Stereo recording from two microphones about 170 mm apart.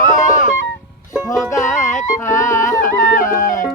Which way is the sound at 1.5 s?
15° left (ahead or behind).